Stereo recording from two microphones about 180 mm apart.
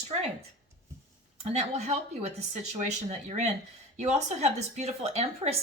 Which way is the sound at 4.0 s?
40° right (ahead or behind).